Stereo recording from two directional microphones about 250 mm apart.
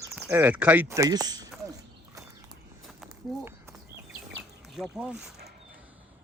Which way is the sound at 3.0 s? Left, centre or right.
Centre.